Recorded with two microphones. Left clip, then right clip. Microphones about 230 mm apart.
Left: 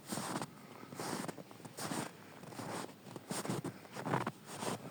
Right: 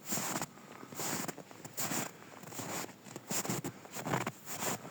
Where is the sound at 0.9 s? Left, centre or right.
Right.